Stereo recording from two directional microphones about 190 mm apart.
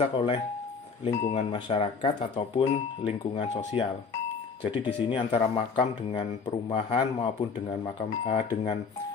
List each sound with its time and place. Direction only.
0.0 s a man's voice: 30° left (ahead or behind)